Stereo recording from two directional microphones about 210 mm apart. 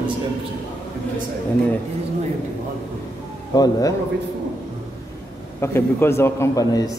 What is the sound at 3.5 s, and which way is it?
Speech, 20° left (ahead or behind).